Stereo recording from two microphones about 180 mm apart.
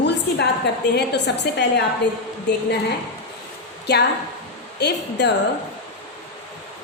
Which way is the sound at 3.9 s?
70° left (ahead or behind).